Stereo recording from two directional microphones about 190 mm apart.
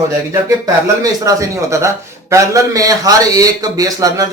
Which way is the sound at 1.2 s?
15° right (ahead or behind).